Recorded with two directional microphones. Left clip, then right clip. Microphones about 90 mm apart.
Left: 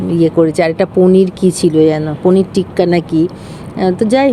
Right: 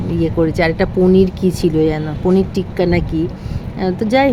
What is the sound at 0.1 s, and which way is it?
Speech, 25° left (ahead or behind).